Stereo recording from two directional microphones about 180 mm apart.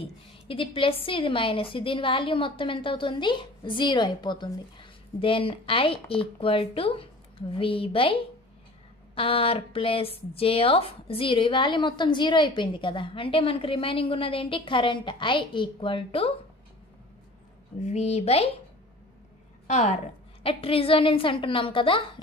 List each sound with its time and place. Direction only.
0.0 s a woman's voice: 30° left (ahead or behind)
17.8 s speech: 40° left (ahead or behind)
19.7 s a woman's voice: 40° left (ahead or behind)